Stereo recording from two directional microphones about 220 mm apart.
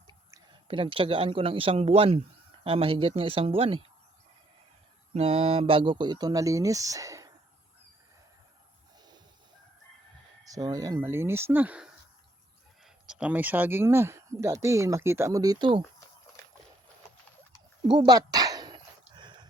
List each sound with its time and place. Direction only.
0.1 s a woman's voice: 15° right (ahead or behind)
5.1 s speech: 25° right (ahead or behind)
10.4 s speech: 15° right (ahead or behind)
17.8 s a sound: 20° right (ahead or behind)